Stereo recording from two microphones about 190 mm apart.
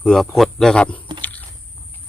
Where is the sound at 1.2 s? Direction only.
10° left (ahead or behind).